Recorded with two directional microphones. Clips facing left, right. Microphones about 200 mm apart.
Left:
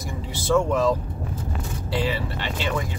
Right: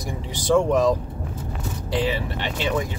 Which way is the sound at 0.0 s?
15° right (ahead or behind).